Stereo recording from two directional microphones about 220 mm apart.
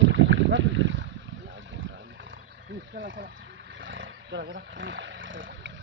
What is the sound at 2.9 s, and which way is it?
Speech, 40° right (ahead or behind).